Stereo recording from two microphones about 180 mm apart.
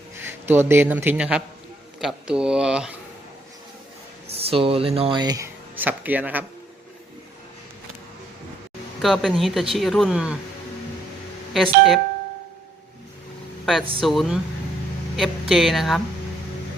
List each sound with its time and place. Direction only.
0.3 s speech: 10° right (ahead or behind)
4.4 s speech: 30° right (ahead or behind)
5.7 s speech: 10° right (ahead or behind)
9.0 s speech: centre (ahead or behind)
11.5 s speech: centre (ahead or behind)
14.0 s speech: centre (ahead or behind)